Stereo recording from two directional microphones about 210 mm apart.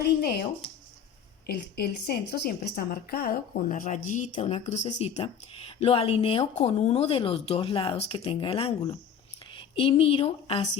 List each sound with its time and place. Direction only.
0.0 s a woman's voice: 50° left (ahead or behind)
1.5 s a woman's voice: 50° left (ahead or behind); by 10.7 s 25° left (ahead or behind)